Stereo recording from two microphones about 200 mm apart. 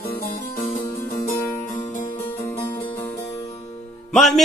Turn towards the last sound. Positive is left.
turn(degrees=0)  # may be behind; listen again after turning